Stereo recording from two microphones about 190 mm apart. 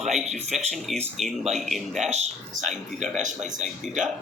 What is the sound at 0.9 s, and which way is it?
Speech, centre (ahead or behind).